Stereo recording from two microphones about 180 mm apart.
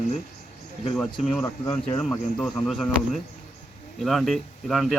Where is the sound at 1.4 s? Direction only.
25° left (ahead or behind).